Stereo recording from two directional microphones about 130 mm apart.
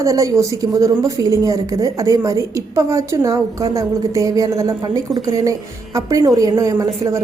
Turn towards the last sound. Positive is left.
turn(degrees=-25)  # may be behind; listen again after turning